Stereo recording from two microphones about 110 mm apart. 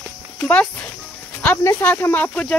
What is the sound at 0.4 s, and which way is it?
Speech, 15° left (ahead or behind).